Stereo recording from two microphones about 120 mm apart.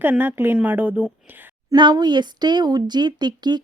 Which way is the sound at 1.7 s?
35° right (ahead or behind).